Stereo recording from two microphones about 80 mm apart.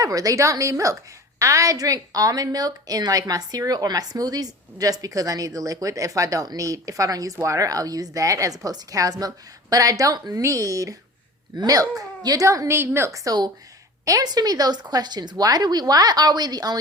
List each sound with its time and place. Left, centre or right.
0.0 s a woman's voice: right